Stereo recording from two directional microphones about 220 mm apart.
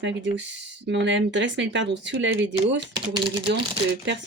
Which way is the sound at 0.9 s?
55° right (ahead or behind).